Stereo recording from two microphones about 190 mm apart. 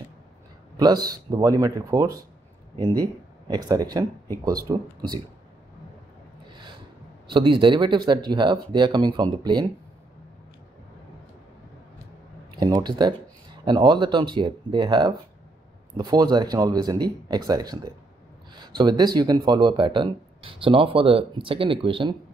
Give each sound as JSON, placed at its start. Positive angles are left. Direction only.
{"t": 0.7, "sound": "speech", "side_deg": -20}
{"t": 7.2, "sound": "speech", "side_deg": -25}
{"t": 12.5, "sound": "speech", "side_deg": -20}